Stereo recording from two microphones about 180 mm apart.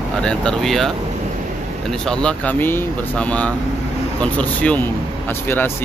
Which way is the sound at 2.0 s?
5° left (ahead or behind).